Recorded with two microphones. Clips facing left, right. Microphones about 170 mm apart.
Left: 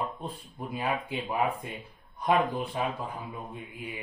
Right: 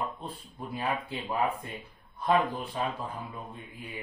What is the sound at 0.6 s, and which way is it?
Speech, 20° left (ahead or behind).